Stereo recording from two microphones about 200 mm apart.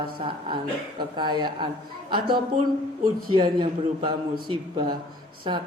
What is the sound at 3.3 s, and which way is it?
Speech, 25° right (ahead or behind).